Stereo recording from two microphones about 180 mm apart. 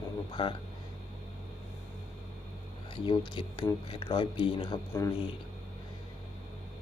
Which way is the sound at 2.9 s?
25° left (ahead or behind).